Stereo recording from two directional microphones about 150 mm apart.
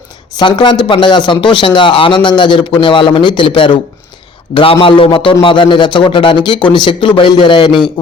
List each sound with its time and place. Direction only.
0.3 s speech: 30° left (ahead or behind)